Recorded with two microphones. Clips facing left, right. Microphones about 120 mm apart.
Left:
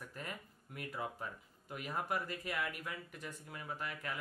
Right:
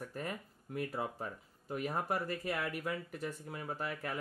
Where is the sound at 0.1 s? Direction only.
35° right (ahead or behind).